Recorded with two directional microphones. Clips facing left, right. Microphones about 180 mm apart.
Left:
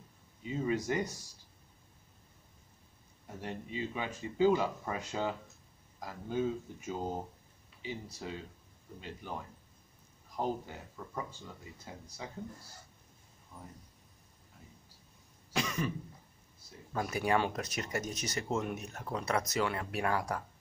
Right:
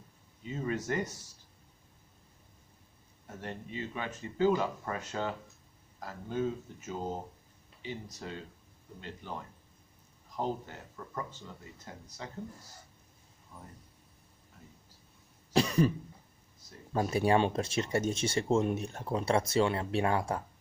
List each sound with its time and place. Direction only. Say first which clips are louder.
0.4 s speech: left 2 dB; 10° left (ahead or behind)
3.3 s speech: left 1 dB; 15° left (ahead or behind)
10.3 s speech: even; 10° left (ahead or behind)
15.5 s cough: right 8 dB; 35° right (ahead or behind)
16.9 s speech: right 4 dB; 30° right (ahead or behind)